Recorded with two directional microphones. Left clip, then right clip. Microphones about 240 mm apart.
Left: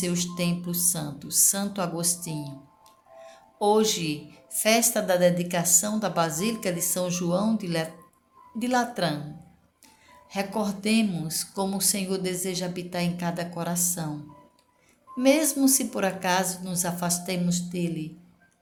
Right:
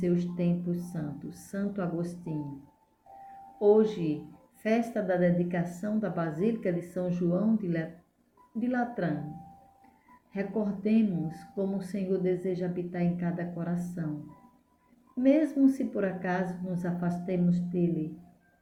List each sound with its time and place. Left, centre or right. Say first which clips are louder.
0.0 s speech: left 2 dB; left
3.6 s speech: left 1 dB; left
10.3 s speech: left 4 dB; left
15.2 s speech: left 3 dB; left